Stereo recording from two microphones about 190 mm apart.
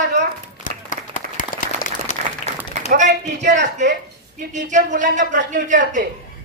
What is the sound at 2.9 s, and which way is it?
Speech, 40° right (ahead or behind).